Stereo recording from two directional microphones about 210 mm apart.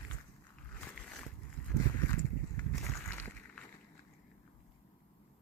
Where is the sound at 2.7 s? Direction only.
15° left (ahead or behind).